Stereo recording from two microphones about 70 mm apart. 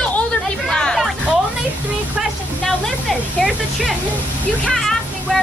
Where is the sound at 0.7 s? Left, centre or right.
Centre.